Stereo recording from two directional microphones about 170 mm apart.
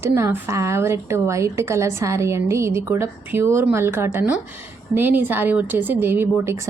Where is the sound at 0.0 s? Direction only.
15° right (ahead or behind).